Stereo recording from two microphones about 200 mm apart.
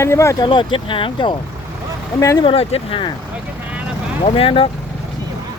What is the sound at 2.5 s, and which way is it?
Speech, 30° left (ahead or behind).